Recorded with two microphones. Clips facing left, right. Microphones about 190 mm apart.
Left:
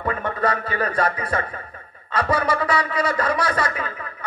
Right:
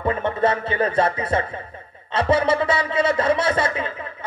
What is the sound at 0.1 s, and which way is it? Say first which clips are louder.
Speech: right 3 dB; 25° right (ahead or behind).